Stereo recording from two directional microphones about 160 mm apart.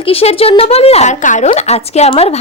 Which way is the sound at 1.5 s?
40° left (ahead or behind).